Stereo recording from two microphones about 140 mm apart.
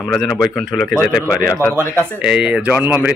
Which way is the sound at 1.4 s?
25° left (ahead or behind).